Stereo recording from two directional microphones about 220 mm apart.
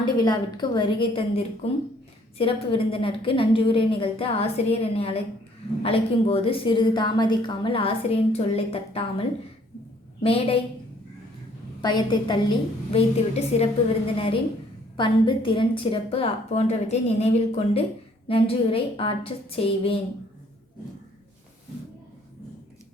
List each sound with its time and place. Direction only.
0.0 s a woman's voice: 20° left (ahead or behind)
10.2 s a woman's voice: 25° left (ahead or behind)
11.8 s a woman's voice: 20° left (ahead or behind)
14.9 s a woman's voice: 20° left (ahead or behind)